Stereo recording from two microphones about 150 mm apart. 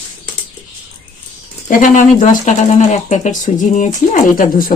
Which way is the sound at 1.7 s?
60° left (ahead or behind).